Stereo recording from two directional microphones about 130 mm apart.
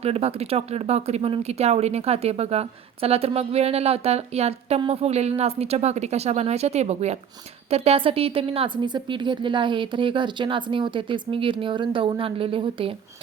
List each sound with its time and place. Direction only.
0.0 s a woman's voice: 50° right (ahead or behind)